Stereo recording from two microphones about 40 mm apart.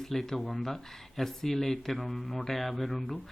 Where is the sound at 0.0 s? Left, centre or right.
Centre.